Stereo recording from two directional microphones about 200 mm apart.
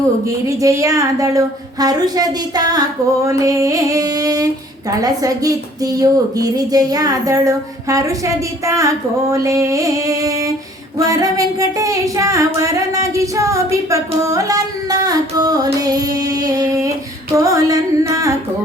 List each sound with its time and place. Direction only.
0.3 s a woman's voice: 15° right (ahead or behind)